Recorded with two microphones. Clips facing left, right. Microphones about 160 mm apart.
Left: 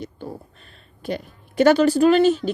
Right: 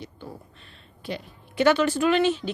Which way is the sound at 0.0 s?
45° left (ahead or behind).